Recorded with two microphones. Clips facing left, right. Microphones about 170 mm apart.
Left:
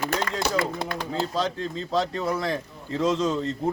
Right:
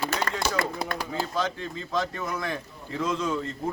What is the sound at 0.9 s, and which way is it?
Speech, 25° left (ahead or behind).